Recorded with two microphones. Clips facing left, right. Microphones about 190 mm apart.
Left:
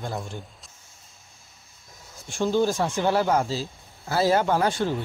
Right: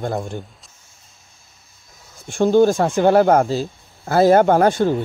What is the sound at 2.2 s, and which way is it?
Speech, 55° right (ahead or behind).